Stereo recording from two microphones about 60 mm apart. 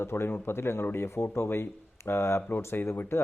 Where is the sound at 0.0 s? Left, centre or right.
Left.